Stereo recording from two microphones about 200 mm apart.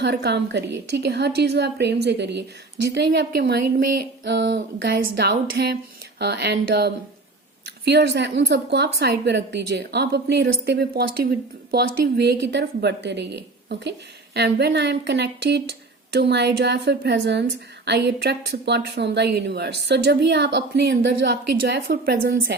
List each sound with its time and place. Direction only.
0.0 s a woman's voice: 60° right (ahead or behind)